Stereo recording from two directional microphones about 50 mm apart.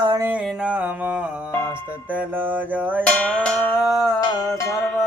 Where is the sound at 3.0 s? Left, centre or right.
Left.